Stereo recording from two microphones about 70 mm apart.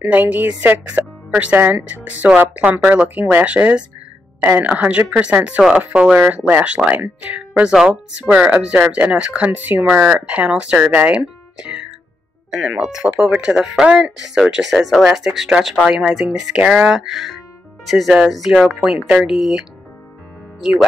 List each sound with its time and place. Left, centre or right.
0.0 s speech: right
5.6 s speech: centre
16.5 s speech: centre
19.0 s speech: centre